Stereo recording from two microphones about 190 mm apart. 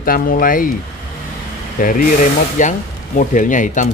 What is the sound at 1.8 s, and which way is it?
A man's voice, 45° left (ahead or behind).